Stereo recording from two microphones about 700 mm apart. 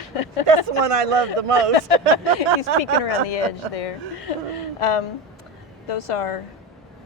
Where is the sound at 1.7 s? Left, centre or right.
Left.